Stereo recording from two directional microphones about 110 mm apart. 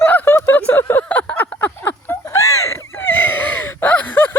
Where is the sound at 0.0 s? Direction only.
20° left (ahead or behind).